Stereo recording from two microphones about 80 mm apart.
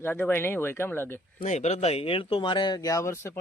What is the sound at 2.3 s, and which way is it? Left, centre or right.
Speech, left.